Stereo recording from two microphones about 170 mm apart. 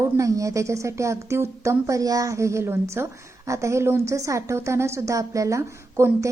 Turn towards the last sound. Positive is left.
turn(degrees=-15)  # may be behind; listen again after turning